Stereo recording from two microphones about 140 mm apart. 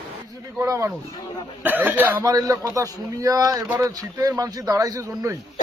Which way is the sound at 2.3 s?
25° right (ahead or behind).